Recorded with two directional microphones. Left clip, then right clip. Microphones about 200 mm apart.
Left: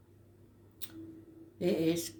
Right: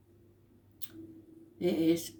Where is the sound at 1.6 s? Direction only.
25° left (ahead or behind).